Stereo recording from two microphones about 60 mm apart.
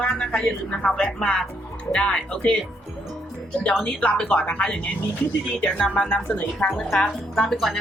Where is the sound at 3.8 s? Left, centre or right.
Centre.